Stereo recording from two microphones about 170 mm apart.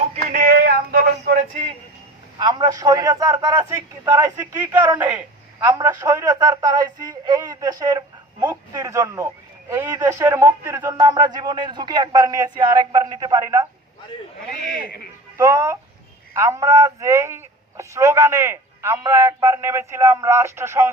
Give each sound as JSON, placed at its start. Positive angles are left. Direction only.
{"t": 0.3, "sound": "a sound", "side_deg": -55}
{"t": 2.4, "sound": "speech", "side_deg": -25}
{"t": 4.4, "sound": "a man's voice", "side_deg": -10}
{"t": 10.9, "sound": "speech", "side_deg": -25}
{"t": 15.4, "sound": "a man's voice", "side_deg": -15}